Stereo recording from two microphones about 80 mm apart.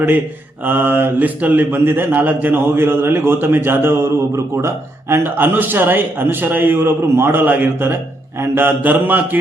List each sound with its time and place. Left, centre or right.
0.6 s speech: right